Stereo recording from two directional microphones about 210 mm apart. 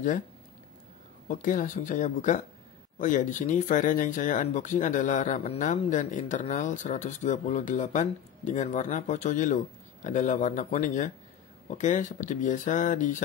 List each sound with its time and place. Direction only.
1.3 s speech: 40° left (ahead or behind)